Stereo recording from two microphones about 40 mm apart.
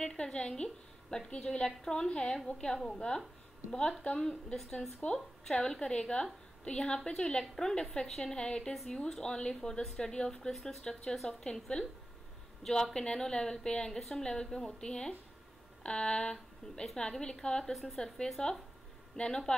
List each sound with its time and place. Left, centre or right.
0.0 s a woman's voice: centre
5.5 s a woman's voice: centre
8.7 s speech: centre
9.0 s speech: centre
11.7 s a woman's voice: left
12.9 s a woman's voice: centre
13.9 s a woman's voice: centre